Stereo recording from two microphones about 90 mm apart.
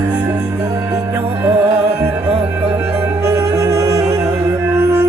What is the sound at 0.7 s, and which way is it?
Music, 40° right (ahead or behind).